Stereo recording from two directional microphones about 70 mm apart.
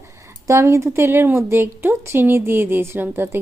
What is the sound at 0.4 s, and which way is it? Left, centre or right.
A woman's voice, right.